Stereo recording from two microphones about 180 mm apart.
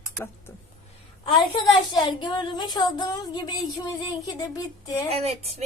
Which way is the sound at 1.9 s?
25° left (ahead or behind).